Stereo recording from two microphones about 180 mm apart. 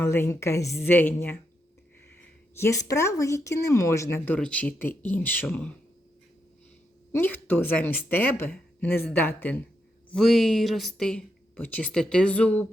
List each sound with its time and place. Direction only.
0.0 s speech: 15° left (ahead or behind)
2.6 s speech: 15° left (ahead or behind)
7.1 s speech: 10° left (ahead or behind)